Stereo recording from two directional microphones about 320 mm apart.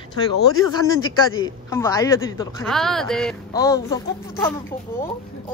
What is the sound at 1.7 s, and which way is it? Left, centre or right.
Speech, centre.